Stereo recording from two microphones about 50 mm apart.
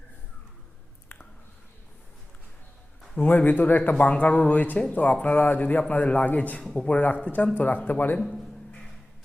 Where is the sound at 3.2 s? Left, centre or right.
Left.